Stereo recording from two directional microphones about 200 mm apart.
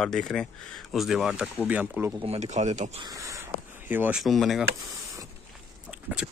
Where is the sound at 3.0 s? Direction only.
15° right (ahead or behind); by 4.6 s centre (ahead or behind).